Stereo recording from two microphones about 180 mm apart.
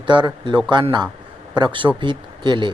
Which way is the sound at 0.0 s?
25° right (ahead or behind).